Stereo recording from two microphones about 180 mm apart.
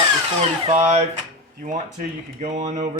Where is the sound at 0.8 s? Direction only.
40° right (ahead or behind).